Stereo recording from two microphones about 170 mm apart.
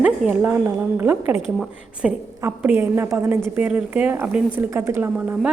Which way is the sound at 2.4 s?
15° right (ahead or behind).